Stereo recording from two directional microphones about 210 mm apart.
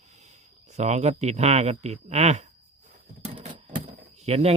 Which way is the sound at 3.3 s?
25° right (ahead or behind).